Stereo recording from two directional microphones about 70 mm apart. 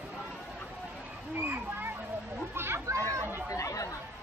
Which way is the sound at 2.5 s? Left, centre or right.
Right.